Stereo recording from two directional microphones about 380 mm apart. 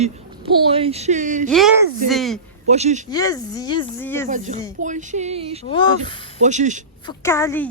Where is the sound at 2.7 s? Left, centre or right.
Centre.